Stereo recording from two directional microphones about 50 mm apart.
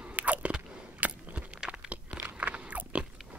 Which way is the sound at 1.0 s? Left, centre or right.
Right.